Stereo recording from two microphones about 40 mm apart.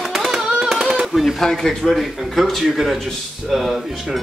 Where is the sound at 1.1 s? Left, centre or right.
Centre.